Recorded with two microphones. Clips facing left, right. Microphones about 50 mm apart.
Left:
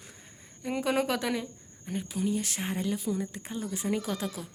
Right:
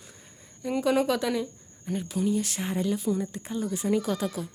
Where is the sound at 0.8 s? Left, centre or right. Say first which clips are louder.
Right 4 dB; centre.